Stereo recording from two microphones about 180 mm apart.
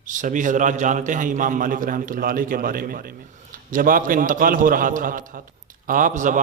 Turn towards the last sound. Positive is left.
turn(degrees=-45)  # may be behind; listen again after turning